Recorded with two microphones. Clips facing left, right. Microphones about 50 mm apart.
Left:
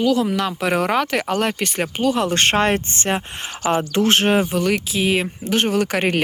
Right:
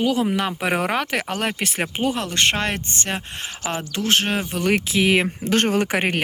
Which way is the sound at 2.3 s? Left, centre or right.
Left.